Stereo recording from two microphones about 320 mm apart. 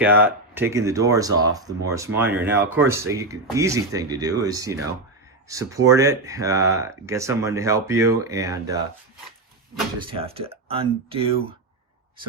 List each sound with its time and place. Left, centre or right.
0.0 s speech: centre
10.1 s speech: centre